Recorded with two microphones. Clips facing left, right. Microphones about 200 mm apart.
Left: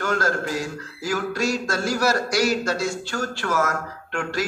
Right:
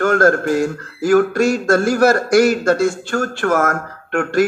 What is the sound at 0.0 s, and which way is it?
Speech, 55° right (ahead or behind).